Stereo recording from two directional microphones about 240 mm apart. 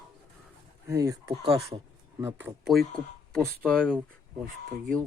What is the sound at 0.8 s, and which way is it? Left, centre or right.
Speech, centre.